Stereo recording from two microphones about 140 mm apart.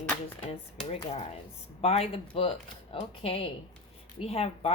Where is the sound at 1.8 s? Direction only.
45° left (ahead or behind).